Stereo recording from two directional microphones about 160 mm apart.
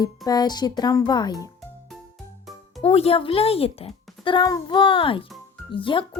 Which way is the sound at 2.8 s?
40° left (ahead or behind).